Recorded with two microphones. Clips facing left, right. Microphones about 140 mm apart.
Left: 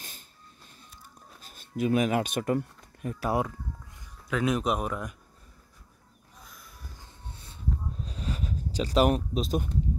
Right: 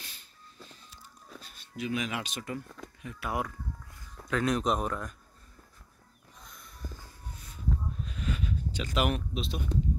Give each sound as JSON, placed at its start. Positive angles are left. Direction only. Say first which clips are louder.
{"t": 1.4, "sound": "speech", "louder": "left 8 dB", "side_deg": 45}
{"t": 3.0, "sound": "speech", "louder": "left 6 dB", "side_deg": 40}
{"t": 4.3, "sound": "speech", "louder": "left 1 dB", "side_deg": 5}
{"t": 6.4, "sound": "a sound", "louder": "right 4 dB", "side_deg": 5}
{"t": 7.0, "sound": "music", "louder": "even", "side_deg": 30}
{"t": 8.0, "sound": "a sound", "louder": "even", "side_deg": 35}